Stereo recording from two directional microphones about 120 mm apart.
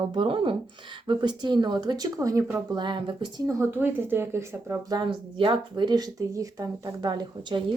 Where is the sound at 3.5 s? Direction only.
20° right (ahead or behind).